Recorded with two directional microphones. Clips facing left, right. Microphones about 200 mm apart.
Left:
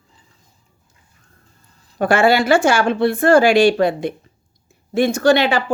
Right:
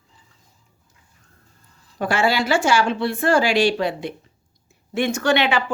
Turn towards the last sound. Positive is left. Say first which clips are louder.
# left 5 dB
turn(degrees=40)  # may be behind; listen again after turning